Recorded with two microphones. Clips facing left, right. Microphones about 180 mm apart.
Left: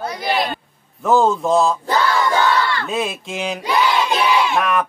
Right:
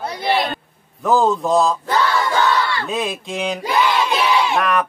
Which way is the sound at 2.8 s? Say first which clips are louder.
Even; centre (ahead or behind).